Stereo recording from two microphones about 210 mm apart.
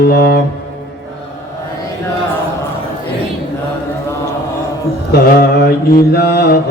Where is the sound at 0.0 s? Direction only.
50° left (ahead or behind).